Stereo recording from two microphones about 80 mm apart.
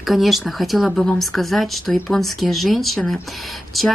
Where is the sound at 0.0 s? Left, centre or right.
Centre.